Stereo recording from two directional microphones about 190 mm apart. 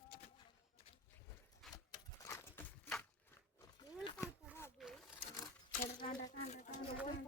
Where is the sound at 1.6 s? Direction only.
Centre (ahead or behind).